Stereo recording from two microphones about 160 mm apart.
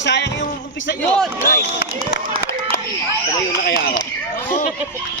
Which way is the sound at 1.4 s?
65° left (ahead or behind).